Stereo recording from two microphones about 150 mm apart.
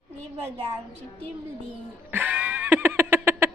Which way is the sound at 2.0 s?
10° right (ahead or behind).